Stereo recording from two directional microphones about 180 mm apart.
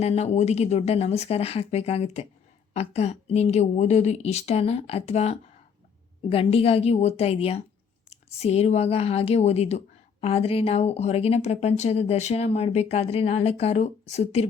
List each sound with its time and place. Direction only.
0.0 s speech: 35° left (ahead or behind)